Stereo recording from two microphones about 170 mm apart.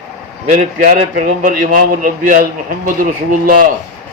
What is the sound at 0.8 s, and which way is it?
A man's voice, 60° right (ahead or behind).